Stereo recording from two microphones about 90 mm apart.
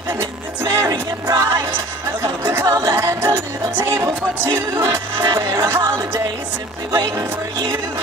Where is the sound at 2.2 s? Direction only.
30° right (ahead or behind).